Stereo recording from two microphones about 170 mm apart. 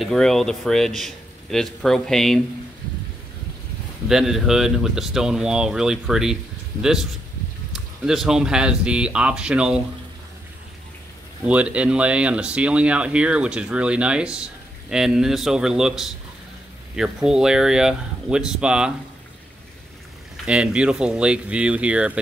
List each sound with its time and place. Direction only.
0.0 s a man's voice: centre (ahead or behind)
4.1 s a man's voice: centre (ahead or behind)
11.4 s a man's voice: 5° right (ahead or behind)
20.4 s speech: 5° right (ahead or behind)